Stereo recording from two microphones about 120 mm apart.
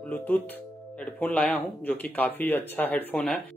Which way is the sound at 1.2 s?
10° left (ahead or behind).